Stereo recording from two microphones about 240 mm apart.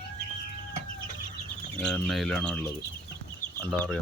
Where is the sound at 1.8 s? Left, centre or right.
Centre.